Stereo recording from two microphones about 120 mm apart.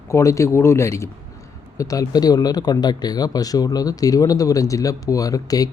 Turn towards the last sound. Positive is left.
turn(degrees=30)  # may be behind; listen again after turning